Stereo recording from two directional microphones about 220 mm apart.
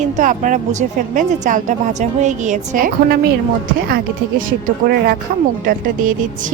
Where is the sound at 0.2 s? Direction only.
35° right (ahead or behind).